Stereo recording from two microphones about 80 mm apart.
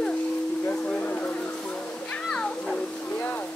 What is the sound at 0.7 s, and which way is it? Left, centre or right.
Music, centre.